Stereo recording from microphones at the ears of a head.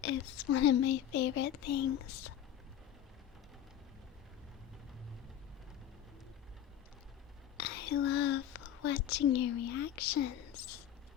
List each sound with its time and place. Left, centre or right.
0.0 s speech: left
7.5 s a woman's voice: left